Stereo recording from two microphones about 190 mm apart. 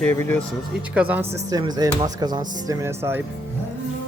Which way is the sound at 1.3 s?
20° right (ahead or behind).